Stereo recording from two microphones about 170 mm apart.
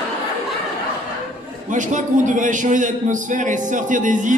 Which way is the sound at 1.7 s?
50° right (ahead or behind).